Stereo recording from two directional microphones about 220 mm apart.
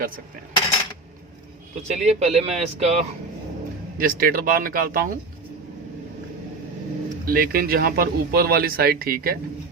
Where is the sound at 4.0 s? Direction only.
40° right (ahead or behind).